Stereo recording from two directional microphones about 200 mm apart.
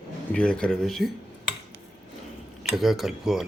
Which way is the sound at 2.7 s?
Centre (ahead or behind).